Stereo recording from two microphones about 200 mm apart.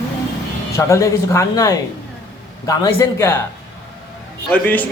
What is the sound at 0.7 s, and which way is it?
A man's voice, 15° left (ahead or behind).